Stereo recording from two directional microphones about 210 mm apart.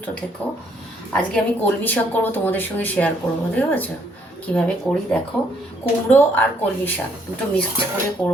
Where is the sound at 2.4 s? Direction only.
10° left (ahead or behind).